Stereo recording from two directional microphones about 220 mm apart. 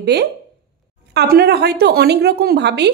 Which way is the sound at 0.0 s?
50° right (ahead or behind).